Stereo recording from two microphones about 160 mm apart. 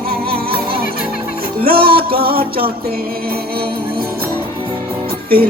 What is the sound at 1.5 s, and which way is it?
Music, 70° right (ahead or behind).